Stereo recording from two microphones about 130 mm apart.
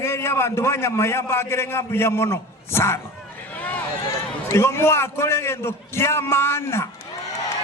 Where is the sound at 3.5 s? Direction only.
10° left (ahead or behind).